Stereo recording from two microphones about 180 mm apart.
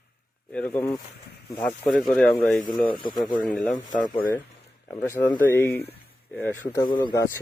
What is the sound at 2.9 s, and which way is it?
Speech, 25° left (ahead or behind).